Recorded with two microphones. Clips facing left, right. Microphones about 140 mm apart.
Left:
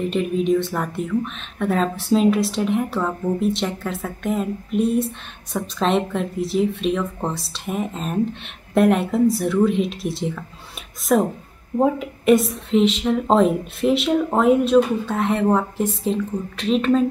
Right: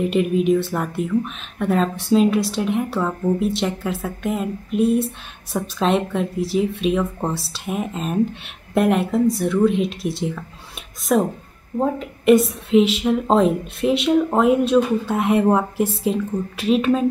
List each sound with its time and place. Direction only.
0.0 s a woman's voice: 5° right (ahead or behind)
15.1 s speech: 10° right (ahead or behind)